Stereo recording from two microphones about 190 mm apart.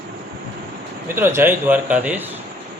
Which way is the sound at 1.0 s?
10° right (ahead or behind).